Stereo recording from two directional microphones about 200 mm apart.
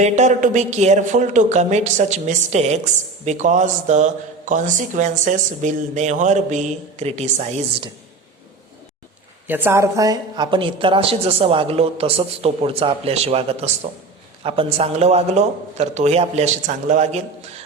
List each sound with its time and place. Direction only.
0.0 s a woman's voice: 35° right (ahead or behind)
9.5 s a woman's voice: 10° right (ahead or behind); by 17.2 s 35° right (ahead or behind)